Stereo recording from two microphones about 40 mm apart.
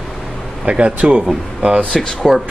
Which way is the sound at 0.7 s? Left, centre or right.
Right.